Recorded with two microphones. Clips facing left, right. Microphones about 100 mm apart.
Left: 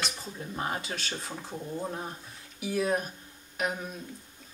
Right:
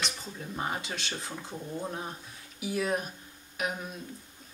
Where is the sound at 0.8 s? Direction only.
35° left (ahead or behind).